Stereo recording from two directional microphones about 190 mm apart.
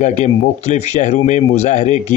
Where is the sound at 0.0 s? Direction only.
35° left (ahead or behind).